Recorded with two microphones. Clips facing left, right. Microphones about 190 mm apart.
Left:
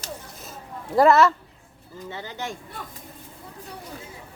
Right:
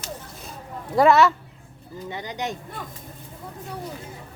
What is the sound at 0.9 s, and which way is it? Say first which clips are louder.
Speech: even; centre (ahead or behind).